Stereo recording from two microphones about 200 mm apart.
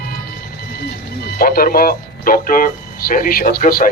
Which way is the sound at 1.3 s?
45° left (ahead or behind).